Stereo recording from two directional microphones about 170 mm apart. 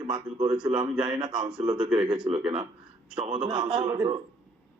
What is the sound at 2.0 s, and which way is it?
Speech, 25° right (ahead or behind).